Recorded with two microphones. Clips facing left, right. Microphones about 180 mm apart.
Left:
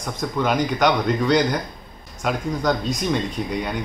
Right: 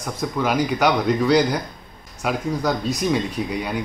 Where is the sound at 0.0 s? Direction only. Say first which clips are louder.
Even; 5° right (ahead or behind).